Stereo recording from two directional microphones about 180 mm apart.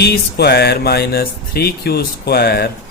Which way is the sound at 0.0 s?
65° left (ahead or behind).